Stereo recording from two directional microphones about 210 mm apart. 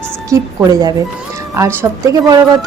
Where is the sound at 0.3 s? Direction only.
20° right (ahead or behind).